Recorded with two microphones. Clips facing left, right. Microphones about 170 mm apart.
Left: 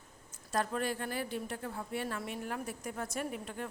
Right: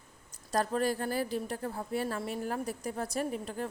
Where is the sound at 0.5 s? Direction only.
35° right (ahead or behind).